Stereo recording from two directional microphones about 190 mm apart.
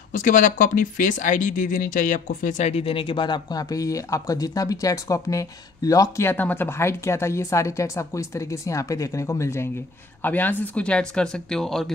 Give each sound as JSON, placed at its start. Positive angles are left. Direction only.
{"t": 0.1, "sound": "speech", "side_deg": 45}